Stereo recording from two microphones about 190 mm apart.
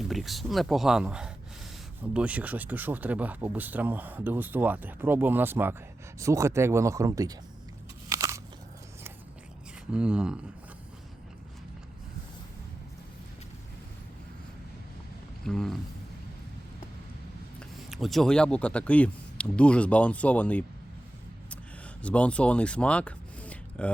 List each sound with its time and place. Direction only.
0.1 s speech: centre (ahead or behind); by 7.3 s 20° right (ahead or behind)
8.1 s biting: 15° right (ahead or behind)
9.9 s speech: 5° right (ahead or behind)
15.4 s speech: centre (ahead or behind)
17.6 s speech: centre (ahead or behind)
22.0 s speech: 5° left (ahead or behind)